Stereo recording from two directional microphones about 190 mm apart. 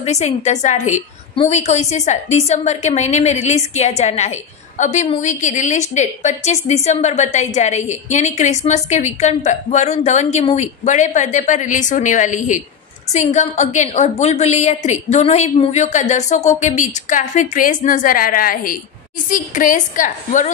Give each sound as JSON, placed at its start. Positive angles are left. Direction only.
{"t": 0.0, "sound": "a woman's voice", "side_deg": 35}